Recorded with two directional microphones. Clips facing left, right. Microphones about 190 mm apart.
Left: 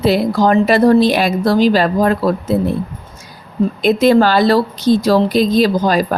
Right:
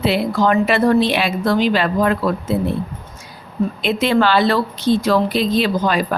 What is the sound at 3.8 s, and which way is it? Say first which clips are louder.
Speech: left 6 dB; 40° left (ahead or behind).